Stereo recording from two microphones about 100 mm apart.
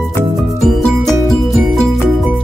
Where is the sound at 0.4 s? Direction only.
Centre (ahead or behind).